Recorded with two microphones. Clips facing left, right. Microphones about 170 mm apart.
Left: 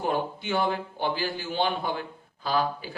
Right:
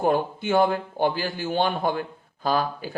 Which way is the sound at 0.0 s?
50° right (ahead or behind).